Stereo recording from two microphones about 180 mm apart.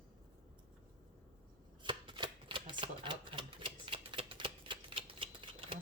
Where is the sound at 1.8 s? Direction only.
25° right (ahead or behind).